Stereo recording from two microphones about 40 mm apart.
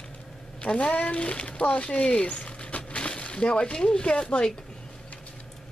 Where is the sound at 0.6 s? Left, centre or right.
Left.